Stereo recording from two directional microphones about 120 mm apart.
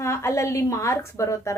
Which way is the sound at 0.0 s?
25° left (ahead or behind).